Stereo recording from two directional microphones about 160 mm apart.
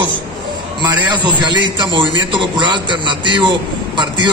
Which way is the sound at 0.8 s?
25° right (ahead or behind).